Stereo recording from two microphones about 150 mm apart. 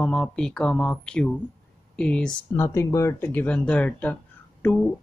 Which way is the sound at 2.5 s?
20° left (ahead or behind).